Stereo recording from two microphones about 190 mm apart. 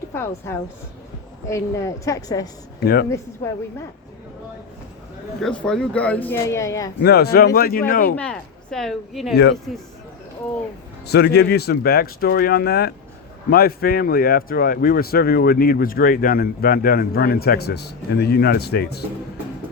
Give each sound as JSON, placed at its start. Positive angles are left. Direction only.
{"t": 0.1, "sound": "a woman's voice", "side_deg": 15}
{"t": 2.8, "sound": "speech", "side_deg": 55}
{"t": 5.4, "sound": "speech", "side_deg": 5}
{"t": 7.0, "sound": "speech", "side_deg": 55}
{"t": 8.1, "sound": "speech", "side_deg": 5}
{"t": 9.3, "sound": "speech", "side_deg": 60}
{"t": 11.0, "sound": "speech", "side_deg": 60}